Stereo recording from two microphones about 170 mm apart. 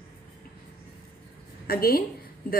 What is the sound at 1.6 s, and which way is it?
Speech, 60° left (ahead or behind).